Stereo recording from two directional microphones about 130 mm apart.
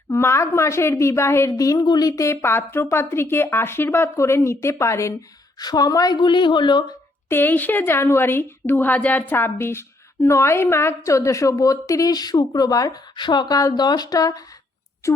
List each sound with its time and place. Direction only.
0.1 s a woman's voice: 20° left (ahead or behind); by 6.8 s 35° left (ahead or behind)
7.3 s a woman's voice: 15° left (ahead or behind)